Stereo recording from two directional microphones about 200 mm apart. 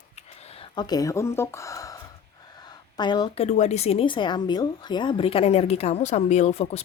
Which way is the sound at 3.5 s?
35° left (ahead or behind).